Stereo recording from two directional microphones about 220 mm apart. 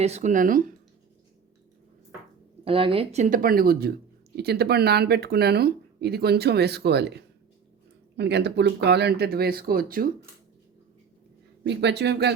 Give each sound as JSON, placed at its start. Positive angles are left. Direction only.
{"t": 0.0, "sound": "speech", "side_deg": -30}
{"t": 2.6, "sound": "speech", "side_deg": -25}
{"t": 11.6, "sound": "speech", "side_deg": -50}